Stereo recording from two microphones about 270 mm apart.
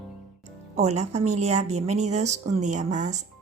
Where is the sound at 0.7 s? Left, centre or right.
Right.